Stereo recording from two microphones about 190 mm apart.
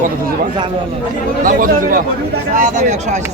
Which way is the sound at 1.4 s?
45° right (ahead or behind).